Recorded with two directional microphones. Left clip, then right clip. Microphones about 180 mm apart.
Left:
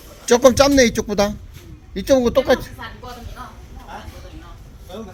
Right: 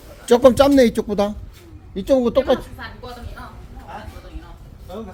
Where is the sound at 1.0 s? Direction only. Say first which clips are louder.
Left 2 dB; 5° left (ahead or behind).